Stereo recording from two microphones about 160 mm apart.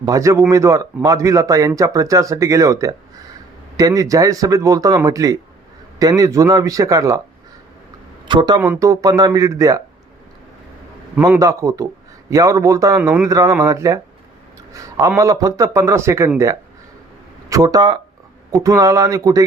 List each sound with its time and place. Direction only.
0.0 s speech: 20° right (ahead or behind)
8.3 s speech: 30° right (ahead or behind)
8.6 s speech: 15° right (ahead or behind)
11.3 s speech: 20° right (ahead or behind)
15.2 s speech: 20° right (ahead or behind)
17.5 s speech: 25° right (ahead or behind)